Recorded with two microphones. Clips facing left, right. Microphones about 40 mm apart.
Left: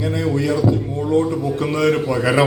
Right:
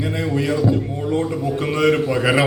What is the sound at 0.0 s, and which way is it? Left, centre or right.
Mantra, centre.